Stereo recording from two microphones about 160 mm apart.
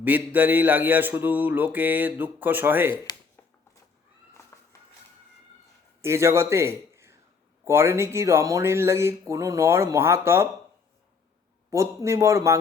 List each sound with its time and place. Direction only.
0.0 s speech: 10° right (ahead or behind)
2.9 s speech: 25° left (ahead or behind)
4.5 s music: 15° left (ahead or behind)
6.0 s a man's voice: 15° right (ahead or behind)
11.7 s speech: 20° right (ahead or behind)